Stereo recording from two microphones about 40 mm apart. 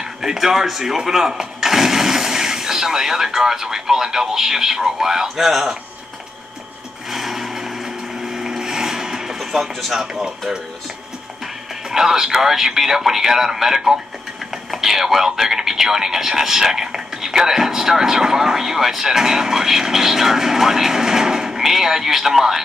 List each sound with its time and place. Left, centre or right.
0.0 s speech: centre
7.1 s wood: centre
11.9 s speech: centre